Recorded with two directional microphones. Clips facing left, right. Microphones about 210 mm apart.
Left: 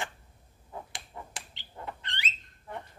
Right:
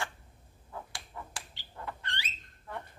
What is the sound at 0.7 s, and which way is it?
Bird, 20° left (ahead or behind).